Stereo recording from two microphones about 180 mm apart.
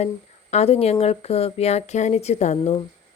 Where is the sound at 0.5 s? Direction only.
35° left (ahead or behind).